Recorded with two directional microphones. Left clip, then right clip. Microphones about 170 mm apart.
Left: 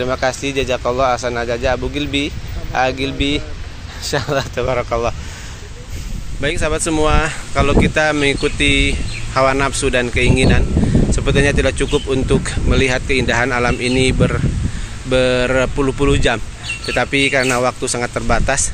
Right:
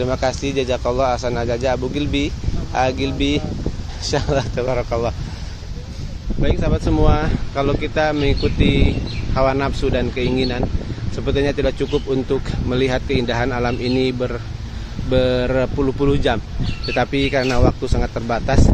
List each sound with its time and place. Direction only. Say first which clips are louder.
0.0 s speech: left 2 dB; 5° right (ahead or behind)
4.6 s speech: left 3 dB; centre (ahead or behind)
6.4 s speech: left 3 dB; 5° left (ahead or behind)